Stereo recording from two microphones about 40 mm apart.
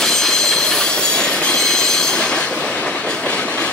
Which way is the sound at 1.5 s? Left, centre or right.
Centre.